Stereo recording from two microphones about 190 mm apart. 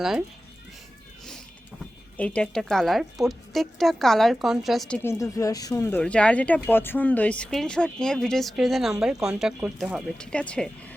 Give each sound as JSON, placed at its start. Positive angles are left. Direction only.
{"t": 2.1, "sound": "speech", "side_deg": 5}
{"t": 5.0, "sound": "speech", "side_deg": 15}